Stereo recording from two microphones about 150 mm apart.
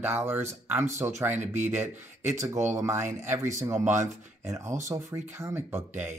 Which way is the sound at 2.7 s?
15° right (ahead or behind).